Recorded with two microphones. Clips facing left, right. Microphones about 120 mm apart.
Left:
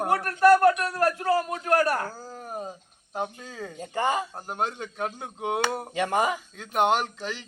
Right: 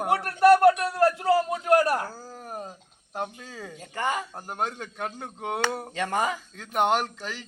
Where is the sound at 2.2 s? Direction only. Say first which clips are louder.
Left 2 dB; 5° right (ahead or behind).